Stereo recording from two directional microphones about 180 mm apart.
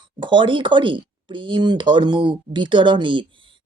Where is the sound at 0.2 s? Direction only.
25° right (ahead or behind).